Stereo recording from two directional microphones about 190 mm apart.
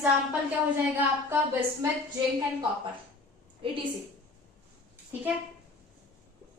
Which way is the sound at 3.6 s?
30° right (ahead or behind).